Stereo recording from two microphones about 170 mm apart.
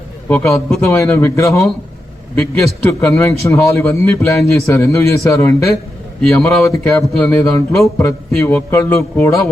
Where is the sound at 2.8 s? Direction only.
15° left (ahead or behind).